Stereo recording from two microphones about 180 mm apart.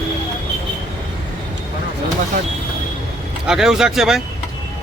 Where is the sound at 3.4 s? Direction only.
5° right (ahead or behind).